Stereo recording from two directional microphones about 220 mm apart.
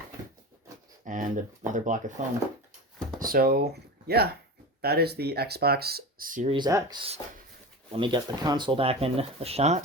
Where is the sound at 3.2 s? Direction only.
40° right (ahead or behind).